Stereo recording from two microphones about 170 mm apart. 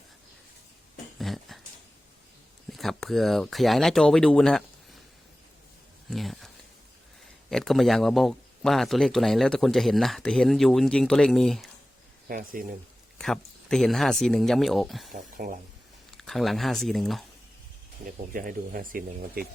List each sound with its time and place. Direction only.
1.2 s a sound: centre (ahead or behind)
2.7 s speech: centre (ahead or behind)
6.1 s a sound: centre (ahead or behind)
7.5 s speech: centre (ahead or behind)
12.3 s speech: 55° right (ahead or behind)
13.1 s speech: 5° left (ahead or behind)
15.1 s speech: 55° right (ahead or behind)
16.1 s speech: centre (ahead or behind)
18.0 s speech: 55° right (ahead or behind)